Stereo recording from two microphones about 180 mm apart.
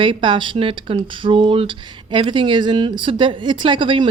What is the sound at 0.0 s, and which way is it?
Speech, 25° right (ahead or behind).